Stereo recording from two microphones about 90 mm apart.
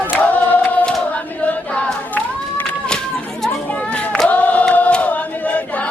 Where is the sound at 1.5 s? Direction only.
15° left (ahead or behind).